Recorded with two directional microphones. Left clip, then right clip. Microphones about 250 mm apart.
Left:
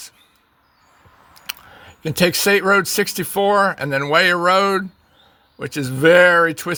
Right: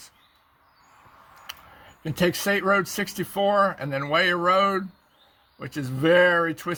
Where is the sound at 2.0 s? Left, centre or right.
Left.